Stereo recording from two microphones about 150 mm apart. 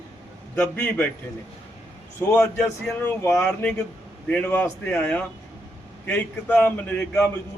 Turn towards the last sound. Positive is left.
turn(degrees=10)  # may be behind; listen again after turning